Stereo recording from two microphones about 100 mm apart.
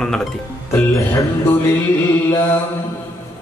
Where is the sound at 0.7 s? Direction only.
30° left (ahead or behind).